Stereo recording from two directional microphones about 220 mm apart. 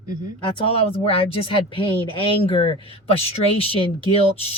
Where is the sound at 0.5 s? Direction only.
25° left (ahead or behind).